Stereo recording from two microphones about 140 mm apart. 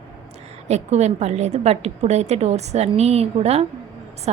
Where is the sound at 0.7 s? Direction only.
50° right (ahead or behind).